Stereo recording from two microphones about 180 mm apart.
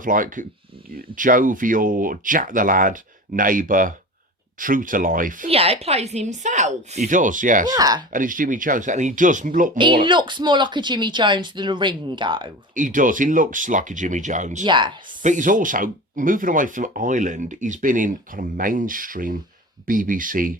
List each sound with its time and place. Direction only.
0.0 s speech: 50° right (ahead or behind)
5.5 s speech: 35° right (ahead or behind)
7.8 s speech: 20° right (ahead or behind)
8.1 s speech: 50° right (ahead or behind)
9.7 s speech: 25° right (ahead or behind)
12.7 s speech: 45° right (ahead or behind)
14.6 s speech: 25° right (ahead or behind)
15.2 s speech: 45° right (ahead or behind)